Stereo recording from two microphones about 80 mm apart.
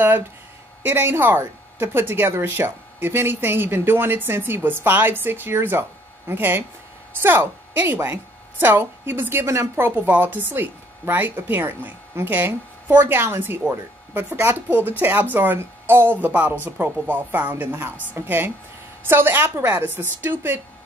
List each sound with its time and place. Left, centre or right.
0.8 s a woman's voice: right